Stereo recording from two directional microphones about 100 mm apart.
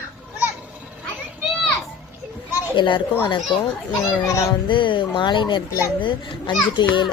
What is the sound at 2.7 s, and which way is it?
Speech, 55° left (ahead or behind).